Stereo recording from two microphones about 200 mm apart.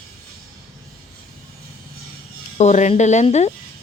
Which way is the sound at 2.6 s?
35° left (ahead or behind).